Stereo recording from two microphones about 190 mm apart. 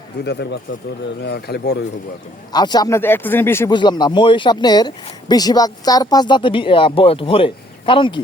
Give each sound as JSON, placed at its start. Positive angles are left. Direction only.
{"t": 0.3, "sound": "speech", "side_deg": 60}
{"t": 2.5, "sound": "speech", "side_deg": 20}
{"t": 3.8, "sound": "speech", "side_deg": 25}